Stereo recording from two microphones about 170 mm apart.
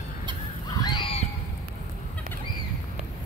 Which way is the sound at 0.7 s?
25° left (ahead or behind).